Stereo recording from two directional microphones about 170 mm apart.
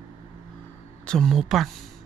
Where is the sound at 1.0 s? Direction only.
5° left (ahead or behind).